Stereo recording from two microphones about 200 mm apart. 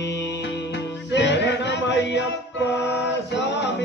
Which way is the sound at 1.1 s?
60° left (ahead or behind).